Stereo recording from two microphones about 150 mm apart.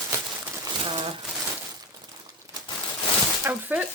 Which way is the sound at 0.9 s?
35° right (ahead or behind).